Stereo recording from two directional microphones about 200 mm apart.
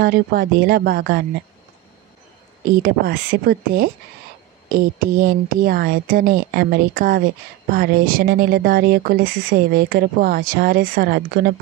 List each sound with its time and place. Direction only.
0.0 s speech: 50° right (ahead or behind)
2.6 s speech: 50° right (ahead or behind)